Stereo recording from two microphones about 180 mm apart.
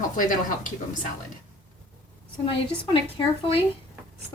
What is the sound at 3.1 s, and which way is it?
Speech, 30° left (ahead or behind).